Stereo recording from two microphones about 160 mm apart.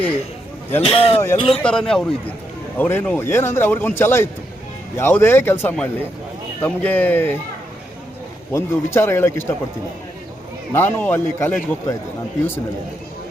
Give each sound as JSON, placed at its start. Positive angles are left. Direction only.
{"t": 0.8, "sound": "speech", "side_deg": 35}
{"t": 1.6, "sound": "a man's voice", "side_deg": 5}
{"t": 8.5, "sound": "a man's voice", "side_deg": 15}
{"t": 10.7, "sound": "a man's voice", "side_deg": 15}